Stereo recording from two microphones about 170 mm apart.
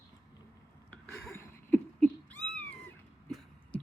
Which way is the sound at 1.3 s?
15° left (ahead or behind).